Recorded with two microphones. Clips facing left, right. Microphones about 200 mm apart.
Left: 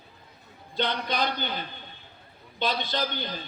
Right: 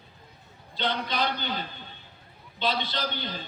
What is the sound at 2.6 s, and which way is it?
Speech, 45° left (ahead or behind).